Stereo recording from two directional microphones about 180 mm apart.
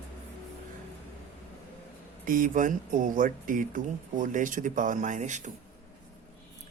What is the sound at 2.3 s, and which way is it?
Speech, 50° right (ahead or behind).